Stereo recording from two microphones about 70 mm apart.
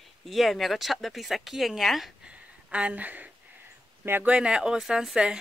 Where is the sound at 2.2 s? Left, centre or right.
Centre.